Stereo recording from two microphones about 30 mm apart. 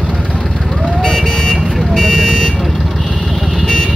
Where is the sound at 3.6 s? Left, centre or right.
Left.